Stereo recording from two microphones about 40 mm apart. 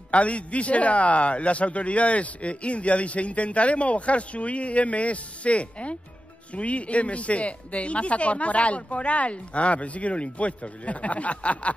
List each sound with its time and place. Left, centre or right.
0.1 s a man's voice: left